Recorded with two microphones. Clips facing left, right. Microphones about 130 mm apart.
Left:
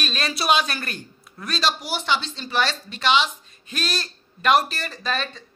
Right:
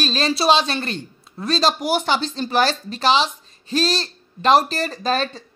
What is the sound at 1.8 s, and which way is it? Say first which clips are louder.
Speech: right 5 dB; 50° right (ahead or behind).